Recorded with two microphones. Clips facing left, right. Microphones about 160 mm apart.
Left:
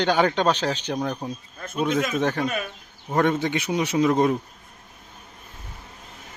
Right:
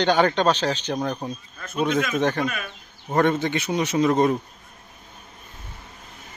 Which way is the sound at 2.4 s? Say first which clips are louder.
Left 1 dB; 35° left (ahead or behind).